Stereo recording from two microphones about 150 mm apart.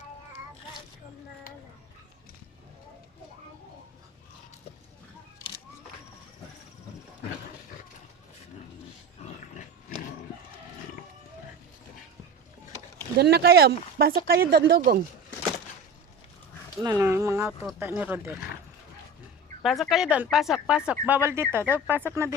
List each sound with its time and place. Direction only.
9.2 s dog: 45° left (ahead or behind)
13.1 s speech: 90° right
16.8 s speech: 20° right (ahead or behind)
19.6 s speech: centre (ahead or behind); by 22.4 s 20° right (ahead or behind)